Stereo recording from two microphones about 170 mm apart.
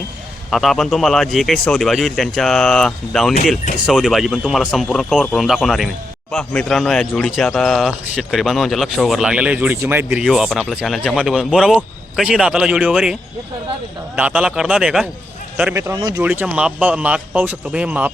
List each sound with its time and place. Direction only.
0.5 s speech: centre (ahead or behind)
14.2 s speech: 5° right (ahead or behind)
16.0 s speech: 25° right (ahead or behind)
16.2 s speech: 10° right (ahead or behind)